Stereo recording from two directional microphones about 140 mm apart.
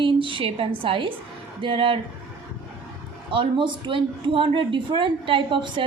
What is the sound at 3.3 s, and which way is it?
A woman's voice, 35° right (ahead or behind).